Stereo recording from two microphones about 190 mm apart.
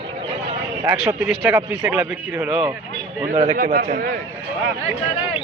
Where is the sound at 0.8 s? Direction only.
10° right (ahead or behind).